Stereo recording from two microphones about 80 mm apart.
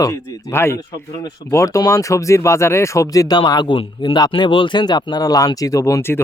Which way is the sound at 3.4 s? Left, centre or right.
Left.